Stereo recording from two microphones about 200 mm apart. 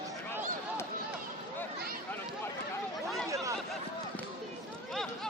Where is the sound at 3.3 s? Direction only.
15° right (ahead or behind).